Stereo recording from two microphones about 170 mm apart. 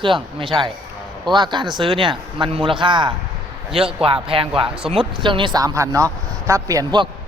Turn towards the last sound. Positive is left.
turn(degrees=-25)  # may be behind; listen again after turning